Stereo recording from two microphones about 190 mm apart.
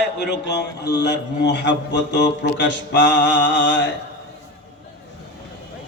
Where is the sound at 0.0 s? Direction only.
65° left (ahead or behind).